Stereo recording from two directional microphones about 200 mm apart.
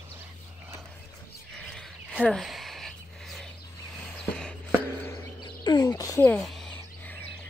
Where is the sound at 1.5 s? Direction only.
Centre (ahead or behind).